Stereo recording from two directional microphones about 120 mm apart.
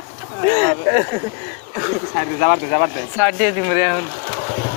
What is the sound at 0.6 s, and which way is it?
Speech, 80° right.